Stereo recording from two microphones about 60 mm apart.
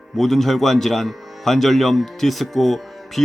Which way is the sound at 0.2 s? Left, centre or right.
Centre.